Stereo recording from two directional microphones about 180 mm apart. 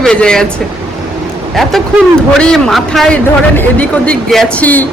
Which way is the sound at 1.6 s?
Centre (ahead or behind).